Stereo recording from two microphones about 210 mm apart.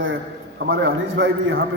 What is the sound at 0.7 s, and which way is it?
Speech, 65° right (ahead or behind).